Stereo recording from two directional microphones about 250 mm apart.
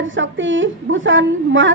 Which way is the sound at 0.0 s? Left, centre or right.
Right.